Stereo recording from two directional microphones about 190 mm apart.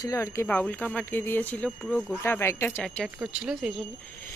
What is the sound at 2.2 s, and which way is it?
Speech, 15° left (ahead or behind).